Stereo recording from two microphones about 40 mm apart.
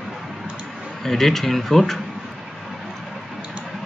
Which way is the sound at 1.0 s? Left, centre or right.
Centre.